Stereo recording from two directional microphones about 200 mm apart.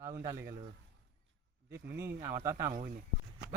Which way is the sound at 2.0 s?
15° right (ahead or behind).